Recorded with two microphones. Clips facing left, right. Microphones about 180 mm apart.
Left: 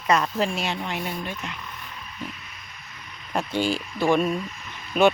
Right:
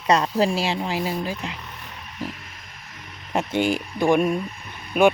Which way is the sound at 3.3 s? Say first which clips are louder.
Right 3 dB; 20° right (ahead or behind).